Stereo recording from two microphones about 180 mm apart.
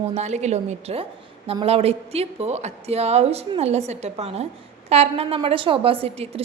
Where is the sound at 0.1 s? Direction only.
40° right (ahead or behind).